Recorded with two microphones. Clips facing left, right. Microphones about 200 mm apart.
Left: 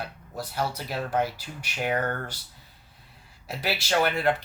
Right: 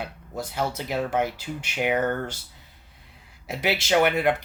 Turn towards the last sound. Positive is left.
turn(degrees=-15)  # may be behind; listen again after turning